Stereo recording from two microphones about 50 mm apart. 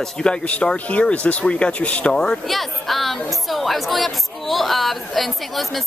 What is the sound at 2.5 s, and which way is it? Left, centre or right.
Speech, centre.